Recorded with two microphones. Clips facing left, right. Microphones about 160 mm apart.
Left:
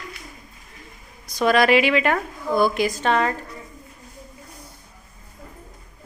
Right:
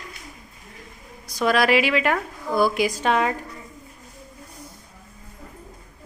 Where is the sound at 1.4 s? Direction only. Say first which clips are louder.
Left 2 dB; 5° right (ahead or behind).